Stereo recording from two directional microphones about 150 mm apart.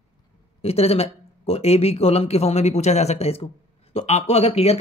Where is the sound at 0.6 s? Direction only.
40° left (ahead or behind).